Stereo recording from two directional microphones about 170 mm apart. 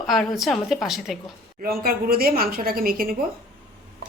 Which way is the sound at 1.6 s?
60° right (ahead or behind).